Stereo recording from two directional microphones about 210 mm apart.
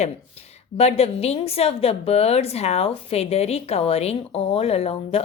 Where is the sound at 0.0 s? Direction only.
30° left (ahead or behind).